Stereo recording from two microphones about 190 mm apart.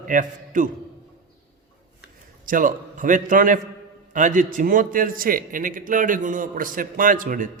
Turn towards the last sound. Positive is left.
turn(degrees=-45)  # may be behind; listen again after turning